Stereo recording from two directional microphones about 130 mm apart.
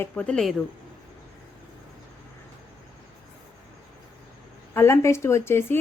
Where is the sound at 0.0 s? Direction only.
10° left (ahead or behind).